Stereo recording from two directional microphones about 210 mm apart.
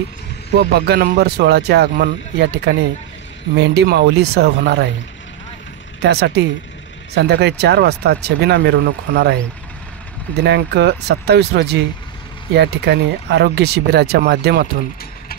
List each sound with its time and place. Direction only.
0.6 s speech: 50° right (ahead or behind)
6.0 s speech: 50° right (ahead or behind)